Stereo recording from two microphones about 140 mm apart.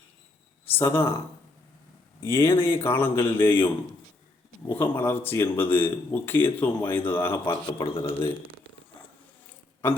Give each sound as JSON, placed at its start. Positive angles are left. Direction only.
{"t": 0.6, "sound": "speech", "side_deg": 15}
{"t": 2.2, "sound": "speech", "side_deg": 20}
{"t": 4.7, "sound": "speech", "side_deg": 15}
{"t": 7.5, "sound": "a man's voice", "side_deg": 30}